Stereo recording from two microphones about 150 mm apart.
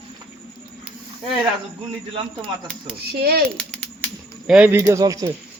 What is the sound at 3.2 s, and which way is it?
Speech, 90° right.